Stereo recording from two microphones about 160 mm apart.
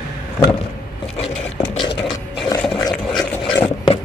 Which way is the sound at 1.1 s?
40° left (ahead or behind).